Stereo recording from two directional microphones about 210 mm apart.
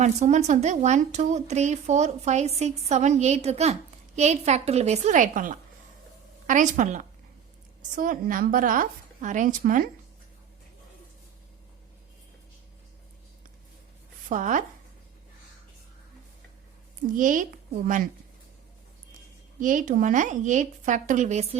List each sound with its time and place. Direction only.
0.0 s a woman's voice: 35° right (ahead or behind)
14.3 s a woman's voice: 35° right (ahead or behind)
17.2 s a woman's voice: 40° right (ahead or behind)
19.5 s a woman's voice: 40° right (ahead or behind)